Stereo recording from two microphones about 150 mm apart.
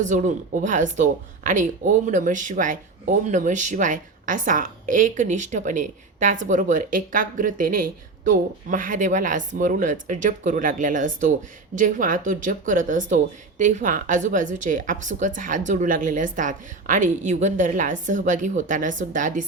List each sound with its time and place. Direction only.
0.0 s speech: 55° right (ahead or behind)